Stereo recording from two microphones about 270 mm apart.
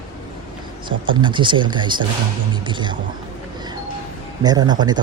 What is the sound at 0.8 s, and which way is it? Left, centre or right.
A woman's voice, centre.